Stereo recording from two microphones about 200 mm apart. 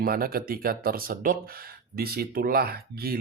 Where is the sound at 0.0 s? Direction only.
45° right (ahead or behind).